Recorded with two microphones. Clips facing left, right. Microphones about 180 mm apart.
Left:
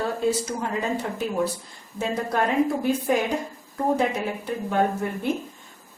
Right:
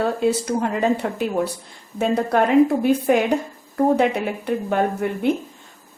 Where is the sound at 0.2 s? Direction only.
65° right (ahead or behind).